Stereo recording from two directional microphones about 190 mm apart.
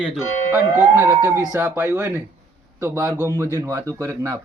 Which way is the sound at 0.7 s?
10° right (ahead or behind).